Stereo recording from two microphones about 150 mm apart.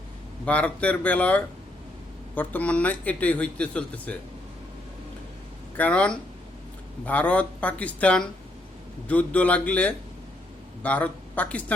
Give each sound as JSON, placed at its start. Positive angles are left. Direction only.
{"t": 0.4, "sound": "speech", "side_deg": 10}
{"t": 5.7, "sound": "speech", "side_deg": 10}